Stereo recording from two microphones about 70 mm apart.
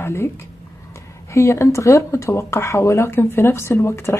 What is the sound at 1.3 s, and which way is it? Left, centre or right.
Speech, left.